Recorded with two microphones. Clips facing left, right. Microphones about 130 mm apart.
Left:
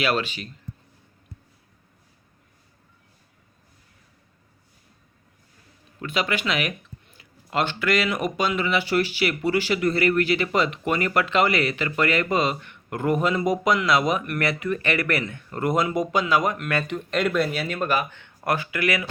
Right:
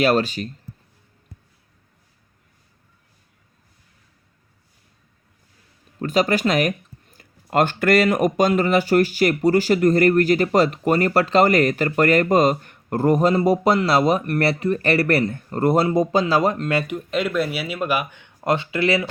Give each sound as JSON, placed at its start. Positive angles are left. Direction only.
{"t": 0.0, "sound": "speech", "side_deg": -40}
{"t": 6.0, "sound": "speech", "side_deg": -40}
{"t": 16.8, "sound": "speech", "side_deg": -5}